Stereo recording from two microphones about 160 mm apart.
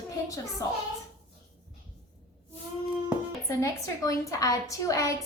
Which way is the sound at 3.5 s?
20° left (ahead or behind).